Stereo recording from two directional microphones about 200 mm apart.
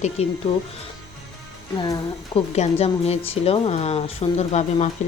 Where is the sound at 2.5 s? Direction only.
30° left (ahead or behind).